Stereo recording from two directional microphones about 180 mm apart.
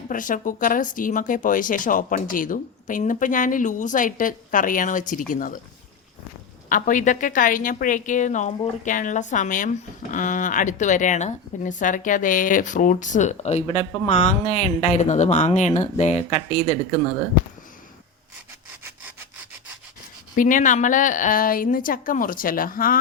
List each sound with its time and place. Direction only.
0.1 s a woman's voice: 50° left (ahead or behind)
6.7 s a woman's voice: 45° left (ahead or behind)
20.3 s a woman's voice: 45° left (ahead or behind)